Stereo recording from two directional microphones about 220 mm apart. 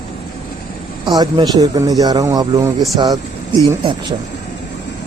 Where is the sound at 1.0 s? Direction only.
20° right (ahead or behind).